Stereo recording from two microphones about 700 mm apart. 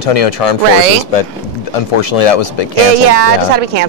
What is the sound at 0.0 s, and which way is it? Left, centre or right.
Speech, left.